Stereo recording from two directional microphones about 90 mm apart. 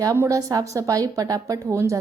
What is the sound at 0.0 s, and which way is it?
A woman's voice, 35° right (ahead or behind).